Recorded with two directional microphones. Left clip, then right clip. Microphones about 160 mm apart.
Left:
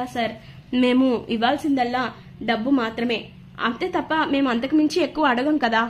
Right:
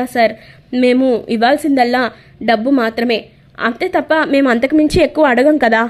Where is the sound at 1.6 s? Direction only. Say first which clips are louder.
Right 9 dB; 40° right (ahead or behind).